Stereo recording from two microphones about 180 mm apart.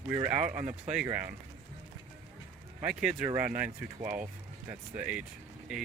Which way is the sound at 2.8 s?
5° right (ahead or behind).